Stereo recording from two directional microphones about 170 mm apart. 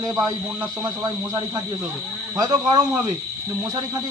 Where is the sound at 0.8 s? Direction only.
25° right (ahead or behind).